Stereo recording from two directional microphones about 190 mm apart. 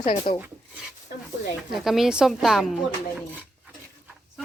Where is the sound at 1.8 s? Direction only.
Centre (ahead or behind).